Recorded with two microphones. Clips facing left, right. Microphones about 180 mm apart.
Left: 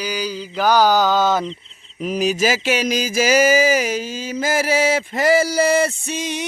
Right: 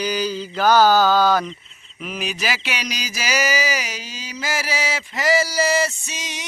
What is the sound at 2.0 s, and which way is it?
Mantra, 40° left (ahead or behind).